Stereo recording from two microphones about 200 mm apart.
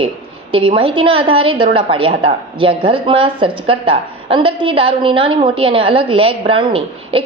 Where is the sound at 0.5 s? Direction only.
25° right (ahead or behind).